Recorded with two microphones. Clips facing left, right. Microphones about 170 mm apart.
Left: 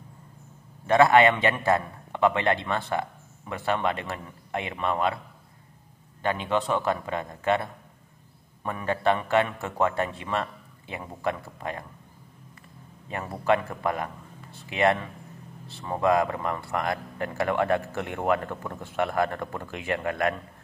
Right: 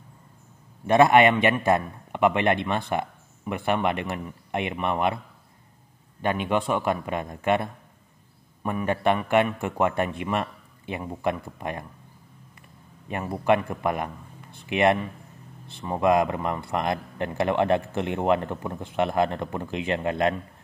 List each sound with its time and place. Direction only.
0.8 s a man's voice: 20° right (ahead or behind)
6.2 s a man's voice: 15° right (ahead or behind)
13.1 s a man's voice: 15° right (ahead or behind)